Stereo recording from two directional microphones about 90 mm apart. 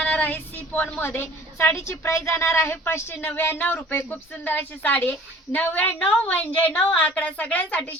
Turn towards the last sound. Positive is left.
turn(degrees=15)  # may be behind; listen again after turning